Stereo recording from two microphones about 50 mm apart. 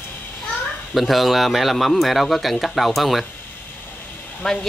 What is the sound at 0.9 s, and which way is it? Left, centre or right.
Speech, centre.